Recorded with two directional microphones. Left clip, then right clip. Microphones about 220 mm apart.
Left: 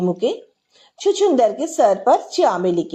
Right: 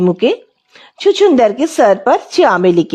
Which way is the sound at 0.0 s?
35° right (ahead or behind).